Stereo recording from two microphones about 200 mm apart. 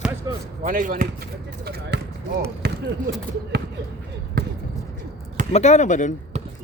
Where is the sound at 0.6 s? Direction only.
45° right (ahead or behind).